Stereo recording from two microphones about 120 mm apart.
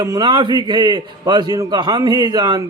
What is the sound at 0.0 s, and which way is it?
A man's voice, 35° right (ahead or behind).